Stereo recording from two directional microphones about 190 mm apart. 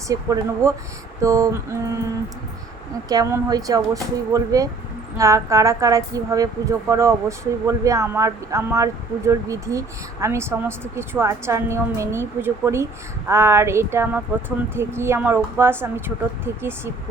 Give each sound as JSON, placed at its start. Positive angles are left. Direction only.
{"t": 0.1, "sound": "speech", "side_deg": -20}
{"t": 3.1, "sound": "speech", "side_deg": -20}